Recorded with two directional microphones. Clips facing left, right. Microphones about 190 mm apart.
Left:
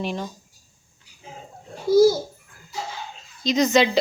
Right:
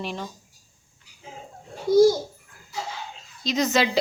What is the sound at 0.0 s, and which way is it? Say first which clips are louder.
Speech: left 4 dB; centre (ahead or behind).